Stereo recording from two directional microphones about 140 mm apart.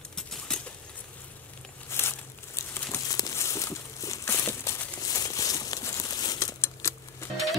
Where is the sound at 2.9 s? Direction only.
25° left (ahead or behind).